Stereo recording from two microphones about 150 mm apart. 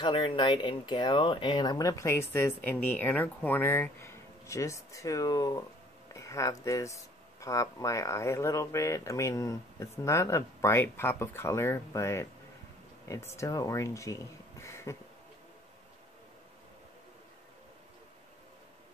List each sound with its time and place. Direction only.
0.0 s speech: 35° left (ahead or behind)
6.1 s a sound: 20° left (ahead or behind)
6.6 s speech: 20° left (ahead or behind)